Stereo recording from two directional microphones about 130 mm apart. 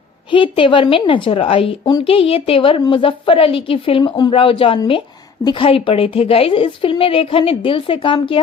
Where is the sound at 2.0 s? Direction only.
45° left (ahead or behind).